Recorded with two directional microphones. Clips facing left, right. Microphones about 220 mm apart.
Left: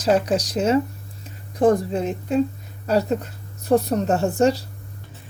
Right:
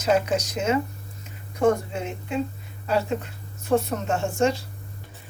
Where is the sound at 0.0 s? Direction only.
35° left (ahead or behind).